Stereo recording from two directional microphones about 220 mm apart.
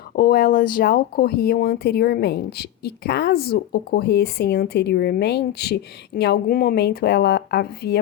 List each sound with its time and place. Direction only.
0.2 s speech: 45° left (ahead or behind)